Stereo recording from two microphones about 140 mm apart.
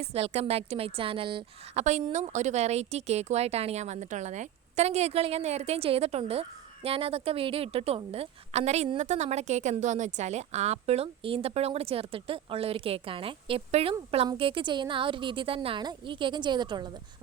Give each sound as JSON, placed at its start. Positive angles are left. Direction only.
{"t": 0.0, "sound": "a woman's voice", "side_deg": -50}
{"t": 1.8, "sound": "a woman's voice", "side_deg": -55}